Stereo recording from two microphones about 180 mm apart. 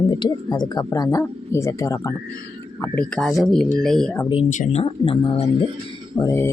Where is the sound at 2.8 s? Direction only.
5° left (ahead or behind).